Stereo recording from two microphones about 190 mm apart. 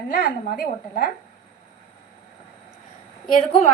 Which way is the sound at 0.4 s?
45° left (ahead or behind).